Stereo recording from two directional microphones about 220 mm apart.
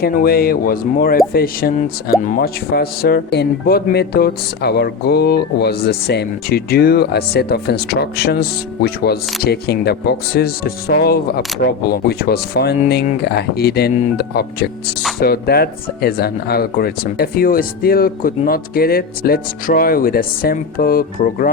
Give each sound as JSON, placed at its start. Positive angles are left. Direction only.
{"t": 0.0, "sound": "speech", "side_deg": 45}